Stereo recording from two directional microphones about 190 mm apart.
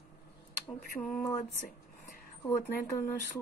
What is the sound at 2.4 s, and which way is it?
Speech, 15° left (ahead or behind).